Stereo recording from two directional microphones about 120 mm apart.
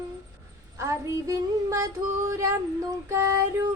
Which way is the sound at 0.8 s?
25° right (ahead or behind).